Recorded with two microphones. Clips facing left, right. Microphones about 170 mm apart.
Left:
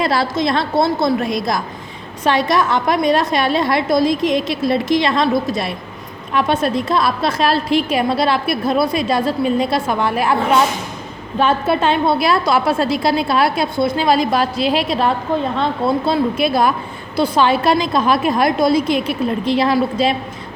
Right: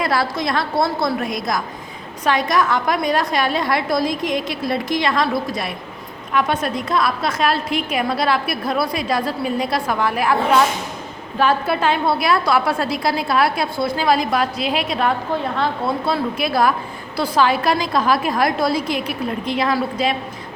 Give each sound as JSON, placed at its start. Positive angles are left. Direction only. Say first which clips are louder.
{"t": 0.0, "sound": "a woman's voice", "louder": "left 3 dB", "side_deg": 25}